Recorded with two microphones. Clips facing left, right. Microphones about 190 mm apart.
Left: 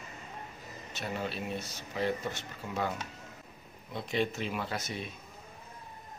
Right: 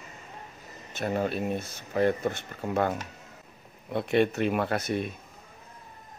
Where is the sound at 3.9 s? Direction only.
60° right (ahead or behind).